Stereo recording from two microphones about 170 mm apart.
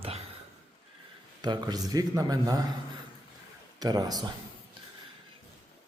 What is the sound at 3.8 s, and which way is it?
Speech, 25° right (ahead or behind).